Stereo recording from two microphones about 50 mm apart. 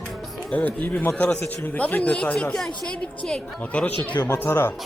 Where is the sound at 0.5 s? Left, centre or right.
Left.